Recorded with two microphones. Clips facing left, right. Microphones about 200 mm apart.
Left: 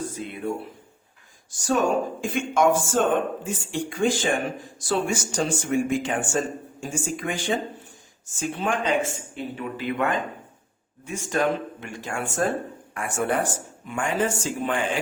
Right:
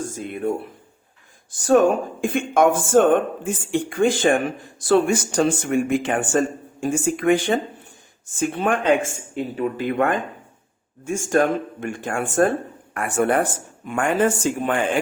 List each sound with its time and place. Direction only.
0.0 s speech: 45° right (ahead or behind)